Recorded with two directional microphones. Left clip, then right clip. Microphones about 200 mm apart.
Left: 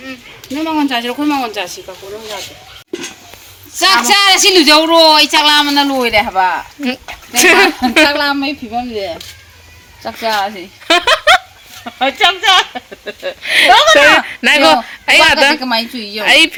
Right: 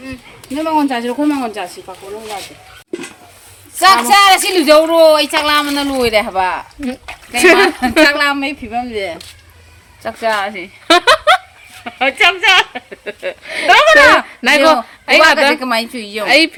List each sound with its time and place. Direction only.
0.5 s speech: 25° right (ahead or behind); by 1.8 s 45° right (ahead or behind)
3.8 s speech: 50° right (ahead or behind)
6.2 s speech: 35° right (ahead or behind)
6.8 s a woman's voice: 5° right (ahead or behind)
10.8 s a sound: centre (ahead or behind)
11.8 s speech: 20° right (ahead or behind)
13.4 s speech: 10° left (ahead or behind)
13.7 s speech: 30° right (ahead or behind)
14.3 s a woman's voice: centre (ahead or behind)
15.6 s a woman's voice: 10° right (ahead or behind)
16.2 s a woman's voice: centre (ahead or behind)